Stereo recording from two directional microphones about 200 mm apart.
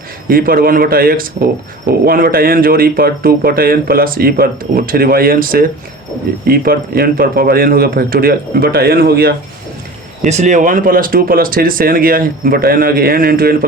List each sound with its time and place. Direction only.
0.3 s speech: 45° right (ahead or behind)
10.2 s speech: 35° right (ahead or behind)